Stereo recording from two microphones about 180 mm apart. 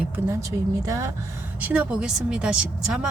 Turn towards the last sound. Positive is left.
turn(degrees=-5)  # may be behind; listen again after turning